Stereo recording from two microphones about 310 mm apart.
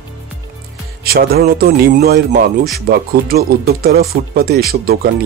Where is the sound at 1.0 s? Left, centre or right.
Right.